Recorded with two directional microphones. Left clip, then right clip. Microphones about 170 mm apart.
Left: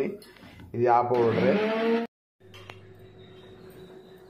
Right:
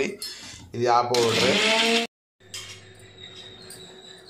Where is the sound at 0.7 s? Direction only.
Centre (ahead or behind).